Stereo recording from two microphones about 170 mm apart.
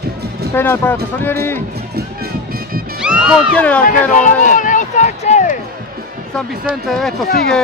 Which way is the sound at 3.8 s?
50° left (ahead or behind).